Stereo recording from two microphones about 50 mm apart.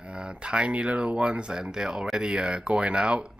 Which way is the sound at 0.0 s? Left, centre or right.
Centre.